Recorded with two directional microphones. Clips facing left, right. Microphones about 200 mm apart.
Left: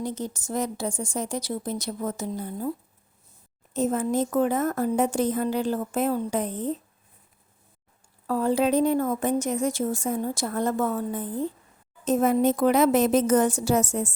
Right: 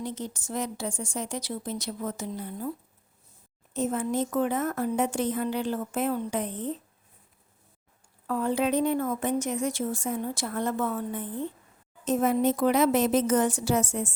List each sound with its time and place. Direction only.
0.0 s speech: 40° left (ahead or behind)
3.8 s speech: 40° left (ahead or behind)
8.3 s speech: 35° left (ahead or behind)